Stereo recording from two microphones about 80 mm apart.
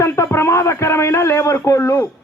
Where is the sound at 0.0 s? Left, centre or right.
Left.